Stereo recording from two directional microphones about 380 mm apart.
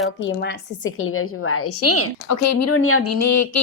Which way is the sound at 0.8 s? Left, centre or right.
Left.